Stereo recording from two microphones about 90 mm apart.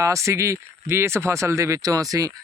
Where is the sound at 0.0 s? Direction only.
35° right (ahead or behind).